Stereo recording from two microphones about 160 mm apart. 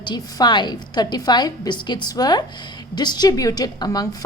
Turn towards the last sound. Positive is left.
turn(degrees=25)  # may be behind; listen again after turning